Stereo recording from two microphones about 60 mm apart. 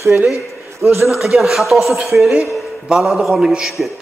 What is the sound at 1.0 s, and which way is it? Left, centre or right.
A man's voice, centre.